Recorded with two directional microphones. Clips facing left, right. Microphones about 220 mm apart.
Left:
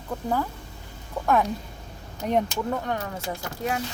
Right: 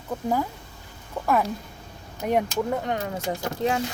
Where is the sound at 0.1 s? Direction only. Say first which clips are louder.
Right 2 dB; 5° right (ahead or behind).